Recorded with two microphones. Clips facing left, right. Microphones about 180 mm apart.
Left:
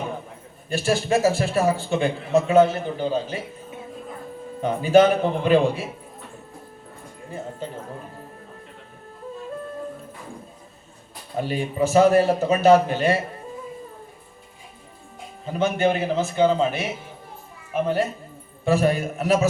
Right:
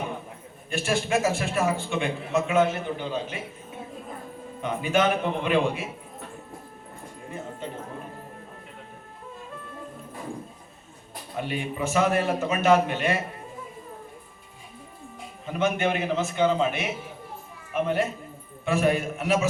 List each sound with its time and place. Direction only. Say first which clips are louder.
0.7 s a man's voice: left 4 dB; 35° left (ahead or behind)
4.6 s a man's voice: left 8 dB; 35° left (ahead or behind)
7.3 s speech: left 3 dB; 35° left (ahead or behind)
11.3 s a man's voice: left 6 dB; 35° left (ahead or behind)
15.4 s a man's voice: left 4 dB; 35° left (ahead or behind)